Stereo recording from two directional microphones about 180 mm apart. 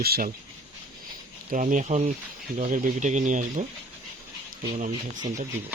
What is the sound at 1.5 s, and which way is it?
Speech, 45° right (ahead or behind).